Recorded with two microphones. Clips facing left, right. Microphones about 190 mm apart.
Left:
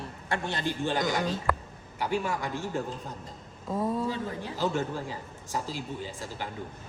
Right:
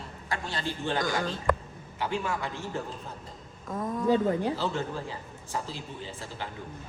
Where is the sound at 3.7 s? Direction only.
25° left (ahead or behind).